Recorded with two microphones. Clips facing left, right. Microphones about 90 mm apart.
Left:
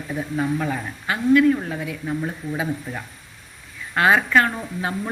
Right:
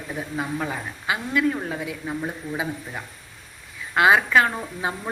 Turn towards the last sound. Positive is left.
turn(degrees=-15)  # may be behind; listen again after turning